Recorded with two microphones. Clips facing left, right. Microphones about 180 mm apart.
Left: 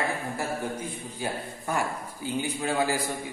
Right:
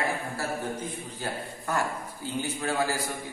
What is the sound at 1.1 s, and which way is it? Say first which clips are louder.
A man's voice: left 2 dB; 15° left (ahead or behind).